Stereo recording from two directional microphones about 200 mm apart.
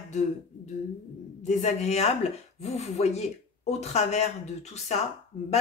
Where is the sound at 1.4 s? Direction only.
35° left (ahead or behind).